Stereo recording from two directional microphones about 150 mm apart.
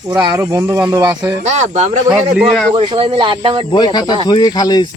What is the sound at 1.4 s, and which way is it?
Speech, 50° right (ahead or behind).